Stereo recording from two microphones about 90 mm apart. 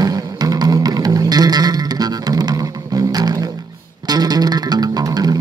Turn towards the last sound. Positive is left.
turn(degrees=-45)  # may be behind; listen again after turning